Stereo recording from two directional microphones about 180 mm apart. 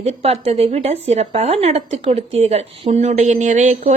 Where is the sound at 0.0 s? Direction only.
35° right (ahead or behind).